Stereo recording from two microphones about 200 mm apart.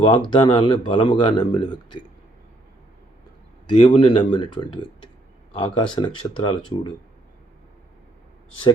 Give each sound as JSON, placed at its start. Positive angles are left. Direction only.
{"t": 0.0, "sound": "speech", "side_deg": 25}
{"t": 3.7, "sound": "speech", "side_deg": 25}